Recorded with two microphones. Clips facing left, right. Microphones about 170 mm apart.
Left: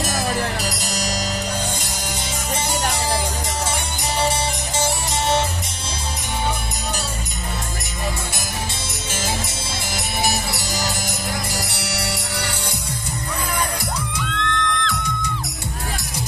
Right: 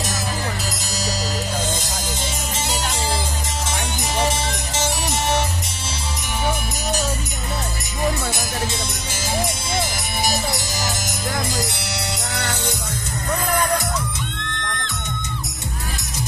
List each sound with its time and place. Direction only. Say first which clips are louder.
14.3 s music: left 7 dB; 90° left